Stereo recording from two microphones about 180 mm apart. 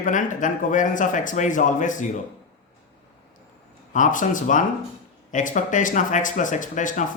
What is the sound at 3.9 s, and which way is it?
Speech, 45° left (ahead or behind).